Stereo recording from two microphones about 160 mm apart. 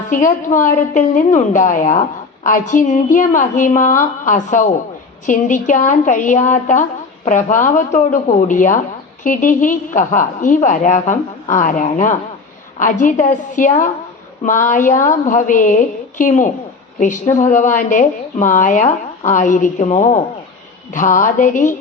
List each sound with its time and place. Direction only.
0.1 s a woman's voice: 55° left (ahead or behind)